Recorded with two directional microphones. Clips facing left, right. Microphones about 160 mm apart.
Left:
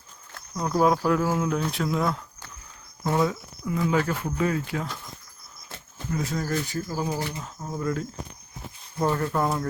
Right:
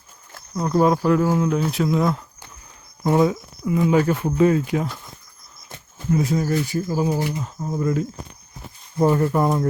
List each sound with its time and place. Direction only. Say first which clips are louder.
0.3 s a sound: right 4 dB; 5° right (ahead or behind)
0.7 s speech: right 4 dB; centre (ahead or behind)
3.0 s speech: right 6 dB; 20° right (ahead or behind)